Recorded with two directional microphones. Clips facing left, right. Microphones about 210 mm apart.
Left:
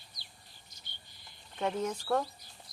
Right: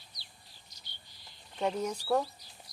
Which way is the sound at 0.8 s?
55° left (ahead or behind).